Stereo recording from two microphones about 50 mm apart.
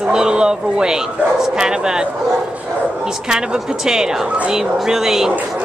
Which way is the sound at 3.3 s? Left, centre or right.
Centre.